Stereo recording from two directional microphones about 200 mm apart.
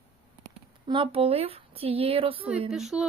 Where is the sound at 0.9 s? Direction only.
25° right (ahead or behind).